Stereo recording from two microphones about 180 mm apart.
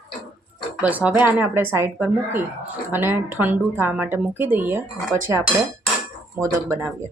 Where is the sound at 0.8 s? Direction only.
10° right (ahead or behind).